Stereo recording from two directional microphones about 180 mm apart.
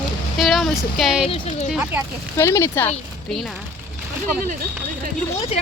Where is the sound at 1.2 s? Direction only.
30° left (ahead or behind).